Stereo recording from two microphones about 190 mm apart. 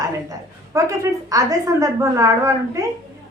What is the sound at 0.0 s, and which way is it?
A woman's voice, 20° right (ahead or behind).